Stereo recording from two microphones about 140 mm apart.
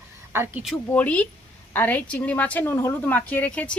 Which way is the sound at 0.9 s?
10° left (ahead or behind).